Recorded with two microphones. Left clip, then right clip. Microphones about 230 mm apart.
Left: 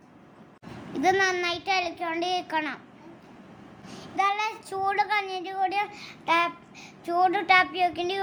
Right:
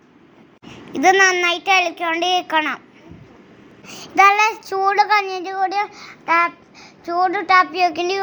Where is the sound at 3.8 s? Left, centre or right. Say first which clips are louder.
Right 13 dB; right; by 5.8 s centre.